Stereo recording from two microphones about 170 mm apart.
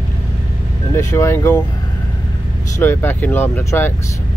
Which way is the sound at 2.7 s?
15° left (ahead or behind).